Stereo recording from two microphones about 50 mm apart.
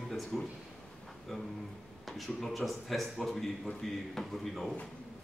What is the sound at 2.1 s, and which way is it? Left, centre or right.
A man's voice, centre.